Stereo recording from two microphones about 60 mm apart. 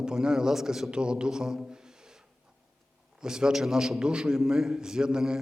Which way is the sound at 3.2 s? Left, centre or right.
Centre.